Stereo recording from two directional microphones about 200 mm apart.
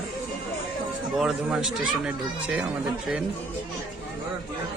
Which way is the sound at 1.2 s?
5° right (ahead or behind).